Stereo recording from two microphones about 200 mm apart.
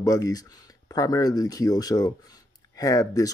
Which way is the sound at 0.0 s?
20° left (ahead or behind).